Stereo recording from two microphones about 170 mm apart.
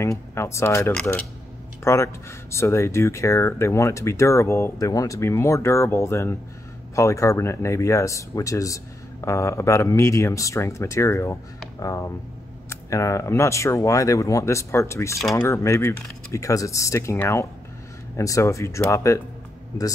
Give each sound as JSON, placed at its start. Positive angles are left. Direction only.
{"t": 0.0, "sound": "speech", "side_deg": 15}